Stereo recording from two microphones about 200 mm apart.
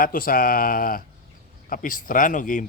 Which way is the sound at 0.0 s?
45° left (ahead or behind).